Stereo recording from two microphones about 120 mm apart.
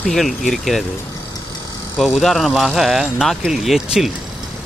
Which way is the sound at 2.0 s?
Centre (ahead or behind).